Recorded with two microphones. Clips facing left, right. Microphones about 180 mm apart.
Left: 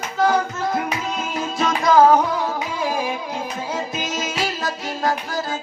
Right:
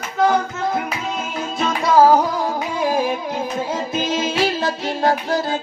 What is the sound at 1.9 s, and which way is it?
Music, 5° right (ahead or behind).